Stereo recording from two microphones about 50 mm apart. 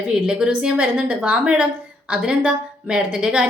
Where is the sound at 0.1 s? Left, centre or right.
Centre.